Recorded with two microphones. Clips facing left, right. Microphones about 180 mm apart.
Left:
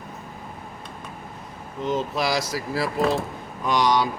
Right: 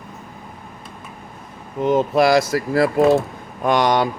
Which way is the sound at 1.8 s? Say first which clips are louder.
Right 9 dB; 55° right (ahead or behind).